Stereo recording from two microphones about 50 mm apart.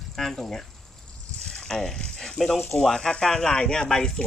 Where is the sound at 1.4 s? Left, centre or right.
Centre.